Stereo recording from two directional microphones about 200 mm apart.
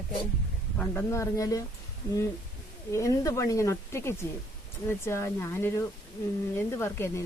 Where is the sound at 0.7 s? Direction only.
5° left (ahead or behind).